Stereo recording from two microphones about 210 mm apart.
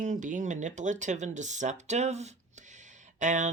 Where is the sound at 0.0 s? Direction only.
40° right (ahead or behind).